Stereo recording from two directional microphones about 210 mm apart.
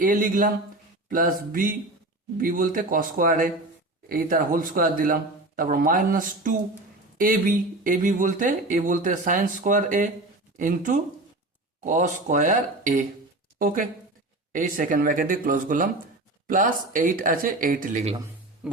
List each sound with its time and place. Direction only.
0.0 s speech: 40° right (ahead or behind)
18.6 s music: 5° right (ahead or behind)